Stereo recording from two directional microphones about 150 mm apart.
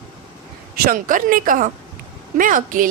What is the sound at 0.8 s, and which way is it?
A woman's voice, 65° right (ahead or behind).